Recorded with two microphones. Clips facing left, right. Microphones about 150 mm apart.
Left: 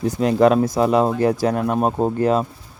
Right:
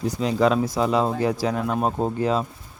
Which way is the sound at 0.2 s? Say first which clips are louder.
Left 5 dB; 55° left (ahead or behind).